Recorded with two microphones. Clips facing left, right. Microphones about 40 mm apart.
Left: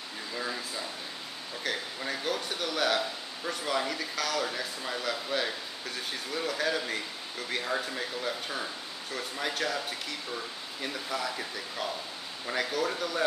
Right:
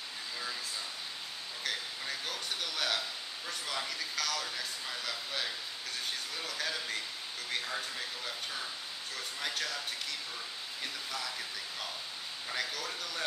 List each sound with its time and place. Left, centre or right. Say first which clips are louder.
0.4 s air conditioning: left 6 dB; left
1.6 s a sound: left 5 dB; centre
3.4 s speech: left 8 dB; centre
9.1 s speech: left 5 dB; centre
10.8 s speech: left 7 dB; centre